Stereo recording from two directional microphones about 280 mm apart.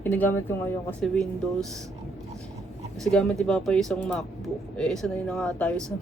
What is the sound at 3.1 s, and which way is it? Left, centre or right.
Speech, centre.